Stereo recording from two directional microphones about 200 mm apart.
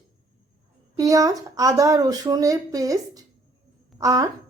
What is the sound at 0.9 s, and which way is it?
A woman's voice, 15° right (ahead or behind).